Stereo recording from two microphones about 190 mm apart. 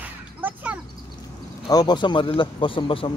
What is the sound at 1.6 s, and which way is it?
Speech, 20° left (ahead or behind).